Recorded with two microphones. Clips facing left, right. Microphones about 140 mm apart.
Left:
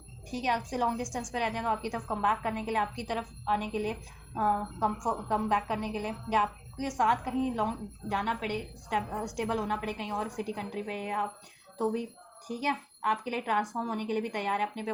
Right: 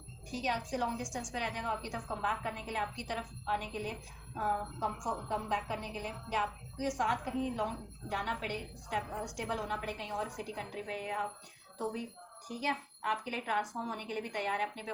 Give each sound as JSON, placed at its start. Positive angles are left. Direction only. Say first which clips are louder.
{"t": 0.3, "sound": "a woman's voice", "louder": "left 4 dB", "side_deg": 55}